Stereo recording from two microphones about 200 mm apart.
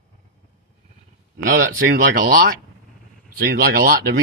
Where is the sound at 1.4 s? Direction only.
45° right (ahead or behind).